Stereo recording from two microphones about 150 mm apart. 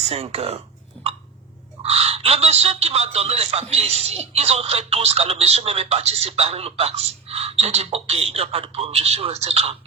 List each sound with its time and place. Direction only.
0.0 s a man's voice: 45° right (ahead or behind)
1.8 s a man's voice: 40° right (ahead or behind)